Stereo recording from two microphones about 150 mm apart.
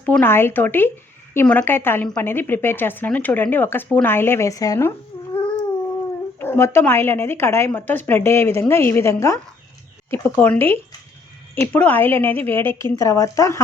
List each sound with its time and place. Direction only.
0.0 s a woman's voice: 10° left (ahead or behind)
6.4 s a woman's voice: 15° left (ahead or behind)